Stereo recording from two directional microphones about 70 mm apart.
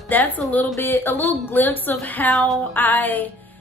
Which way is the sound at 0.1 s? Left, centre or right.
Left.